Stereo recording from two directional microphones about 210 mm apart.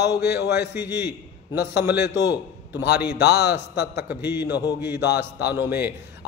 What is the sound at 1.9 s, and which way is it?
A man's voice, 55° left (ahead or behind).